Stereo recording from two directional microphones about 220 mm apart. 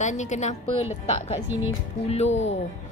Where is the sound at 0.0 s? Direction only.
35° left (ahead or behind).